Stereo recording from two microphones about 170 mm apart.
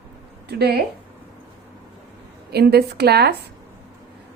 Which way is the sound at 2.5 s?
70° right (ahead or behind).